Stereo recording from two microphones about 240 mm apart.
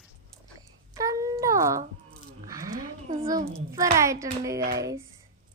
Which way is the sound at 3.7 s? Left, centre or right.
Centre.